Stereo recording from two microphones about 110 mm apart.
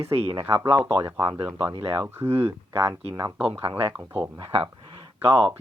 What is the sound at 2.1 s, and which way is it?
Speech, 20° right (ahead or behind).